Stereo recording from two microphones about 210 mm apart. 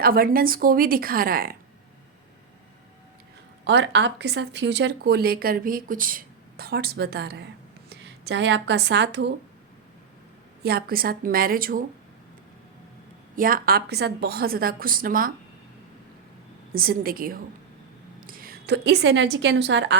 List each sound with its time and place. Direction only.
0.0 s speech: 45° right (ahead or behind)
3.6 s speech: 55° right (ahead or behind)
10.6 s speech: 50° right (ahead or behind)
13.3 s speech: 40° right (ahead or behind)
16.7 s a woman's voice: 45° right (ahead or behind)